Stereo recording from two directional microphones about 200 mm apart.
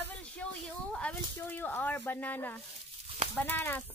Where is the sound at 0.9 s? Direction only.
10° left (ahead or behind).